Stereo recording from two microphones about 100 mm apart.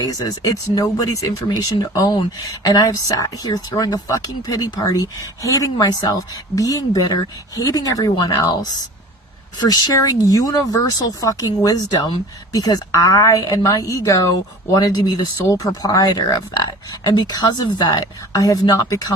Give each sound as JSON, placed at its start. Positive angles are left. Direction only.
{"t": 0.0, "sound": "speech", "side_deg": 40}
{"t": 1.5, "sound": "speech", "side_deg": 45}